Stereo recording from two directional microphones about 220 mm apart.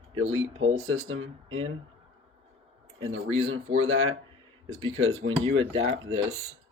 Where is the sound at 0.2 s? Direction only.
65° right (ahead or behind).